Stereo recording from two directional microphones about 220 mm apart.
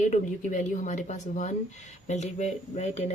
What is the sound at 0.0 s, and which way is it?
Speech, 35° left (ahead or behind).